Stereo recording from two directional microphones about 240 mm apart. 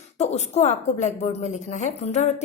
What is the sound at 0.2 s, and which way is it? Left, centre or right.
A woman's voice, left.